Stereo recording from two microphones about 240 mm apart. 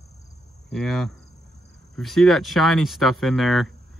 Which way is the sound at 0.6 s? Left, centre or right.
Centre.